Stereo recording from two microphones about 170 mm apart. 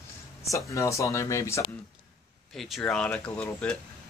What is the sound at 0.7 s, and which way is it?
A man's voice, 20° left (ahead or behind).